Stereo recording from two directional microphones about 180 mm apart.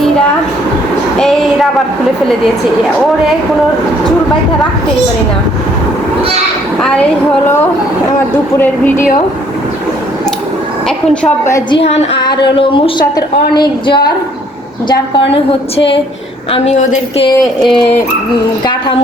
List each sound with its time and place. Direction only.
1.2 s a woman's voice: centre (ahead or behind)
8.5 s speech: 10° left (ahead or behind)
10.8 s a woman's voice: 5° left (ahead or behind)
11.4 s speech: 15° left (ahead or behind)
11.8 s a woman's voice: 35° left (ahead or behind)
16.5 s speech: 40° left (ahead or behind)